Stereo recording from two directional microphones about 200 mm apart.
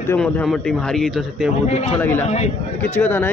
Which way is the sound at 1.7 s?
35° left (ahead or behind).